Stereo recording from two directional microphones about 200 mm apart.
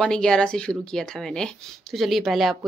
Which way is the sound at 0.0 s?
5° left (ahead or behind).